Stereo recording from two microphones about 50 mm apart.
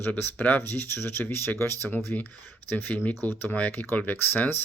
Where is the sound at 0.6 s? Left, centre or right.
Left.